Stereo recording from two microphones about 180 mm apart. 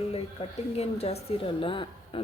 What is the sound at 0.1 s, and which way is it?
Speech, 35° left (ahead or behind).